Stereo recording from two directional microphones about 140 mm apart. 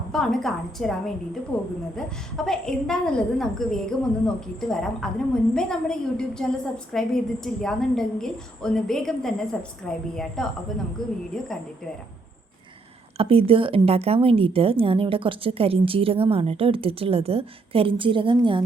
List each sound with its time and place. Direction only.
0.1 s a woman's voice: 5° left (ahead or behind)
13.1 s a woman's voice: 40° right (ahead or behind)